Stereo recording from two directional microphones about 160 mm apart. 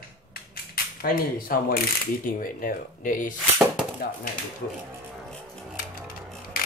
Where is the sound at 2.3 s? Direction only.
60° left (ahead or behind).